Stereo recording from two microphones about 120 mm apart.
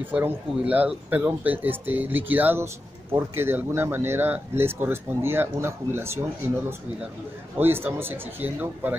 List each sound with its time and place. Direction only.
0.0 s speech: 15° right (ahead or behind)
7.5 s speech: 20° right (ahead or behind)